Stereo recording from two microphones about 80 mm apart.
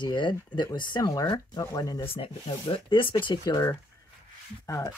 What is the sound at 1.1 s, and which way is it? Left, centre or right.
Speech, left.